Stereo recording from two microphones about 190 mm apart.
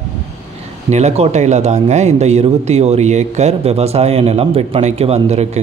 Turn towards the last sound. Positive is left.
turn(degrees=-35)  # may be behind; listen again after turning